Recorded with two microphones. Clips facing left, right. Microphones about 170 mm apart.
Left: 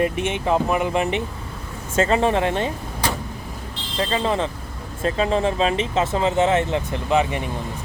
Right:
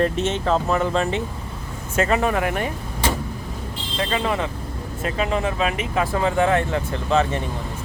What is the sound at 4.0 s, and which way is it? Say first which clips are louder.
Speech: left 2 dB; 30° left (ahead or behind).